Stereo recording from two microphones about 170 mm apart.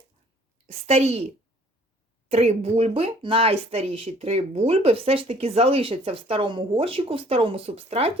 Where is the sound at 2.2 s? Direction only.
40° right (ahead or behind).